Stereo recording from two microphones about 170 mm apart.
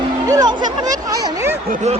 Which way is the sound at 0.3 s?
25° right (ahead or behind).